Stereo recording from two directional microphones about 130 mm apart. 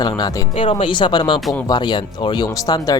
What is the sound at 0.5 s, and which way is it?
Speech, 45° left (ahead or behind).